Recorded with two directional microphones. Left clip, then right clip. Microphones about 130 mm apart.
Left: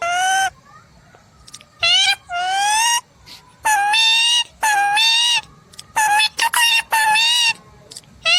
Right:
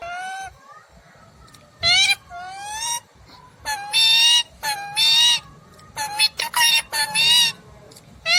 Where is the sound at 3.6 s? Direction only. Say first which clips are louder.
Left 4 dB; 60° left (ahead or behind).